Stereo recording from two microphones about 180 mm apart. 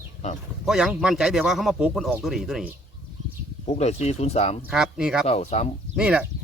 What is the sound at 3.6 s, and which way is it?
Speech, 35° left (ahead or behind).